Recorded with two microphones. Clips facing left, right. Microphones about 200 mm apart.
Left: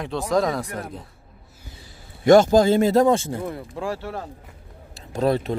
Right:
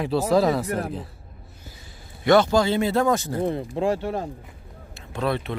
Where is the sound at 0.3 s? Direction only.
5° right (ahead or behind).